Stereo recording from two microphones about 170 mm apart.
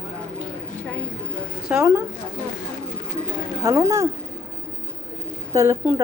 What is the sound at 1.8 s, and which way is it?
Speech, 15° right (ahead or behind).